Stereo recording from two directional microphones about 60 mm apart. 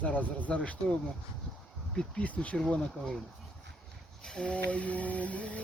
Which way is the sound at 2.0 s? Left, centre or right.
Left.